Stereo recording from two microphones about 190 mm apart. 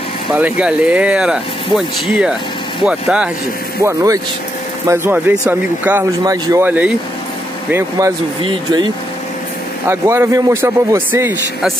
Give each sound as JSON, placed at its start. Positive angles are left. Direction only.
{"t": 0.3, "sound": "speech", "side_deg": -10}
{"t": 3.8, "sound": "speech", "side_deg": -15}
{"t": 8.4, "sound": "speech", "side_deg": -25}
{"t": 9.8, "sound": "speech", "side_deg": -15}